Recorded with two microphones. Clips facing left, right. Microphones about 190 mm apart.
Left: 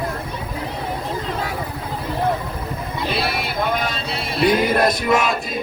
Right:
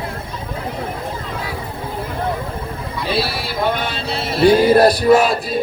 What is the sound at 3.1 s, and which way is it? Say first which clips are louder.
Vehicle: right 3 dB; 30° right (ahead or behind).